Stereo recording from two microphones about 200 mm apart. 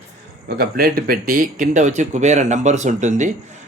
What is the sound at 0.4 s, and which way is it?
Speech, 50° right (ahead or behind).